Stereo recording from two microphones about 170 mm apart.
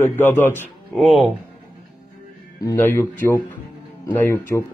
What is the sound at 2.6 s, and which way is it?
Speech, 15° left (ahead or behind).